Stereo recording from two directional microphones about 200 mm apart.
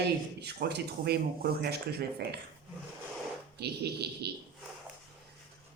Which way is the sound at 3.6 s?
55° right (ahead or behind).